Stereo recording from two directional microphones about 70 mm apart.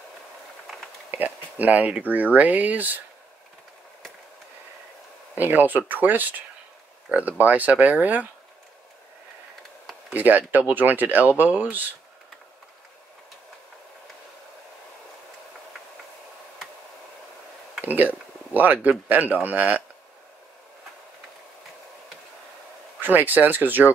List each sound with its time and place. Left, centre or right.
1.1 s speech: right
5.3 s speech: right
10.1 s speech: right
17.8 s speech: right
22.9 s speech: right